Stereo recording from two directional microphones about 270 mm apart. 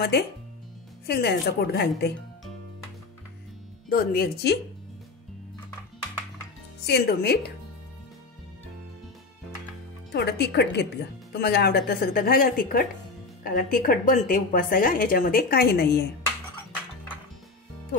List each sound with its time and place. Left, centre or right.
1.0 s a woman's voice: left
3.9 s a woman's voice: left
6.9 s a woman's voice: left
10.1 s a woman's voice: left